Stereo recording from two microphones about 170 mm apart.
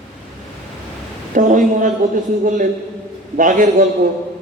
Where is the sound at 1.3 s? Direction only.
50° right (ahead or behind).